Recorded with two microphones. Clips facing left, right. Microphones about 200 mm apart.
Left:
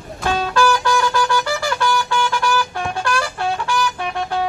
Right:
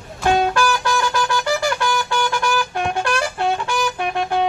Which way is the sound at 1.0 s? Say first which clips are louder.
Left 2 dB; 20° right (ahead or behind).